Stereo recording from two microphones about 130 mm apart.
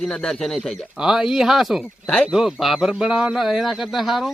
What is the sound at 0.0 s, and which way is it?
A man's voice, 5° left (ahead or behind).